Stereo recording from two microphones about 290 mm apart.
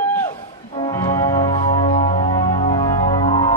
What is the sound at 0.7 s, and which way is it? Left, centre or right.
Music, centre.